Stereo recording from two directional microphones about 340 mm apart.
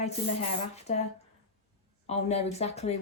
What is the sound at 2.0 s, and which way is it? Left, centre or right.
Speech, centre.